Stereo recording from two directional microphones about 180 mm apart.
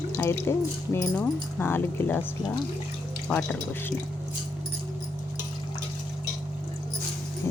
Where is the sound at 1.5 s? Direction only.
10° left (ahead or behind).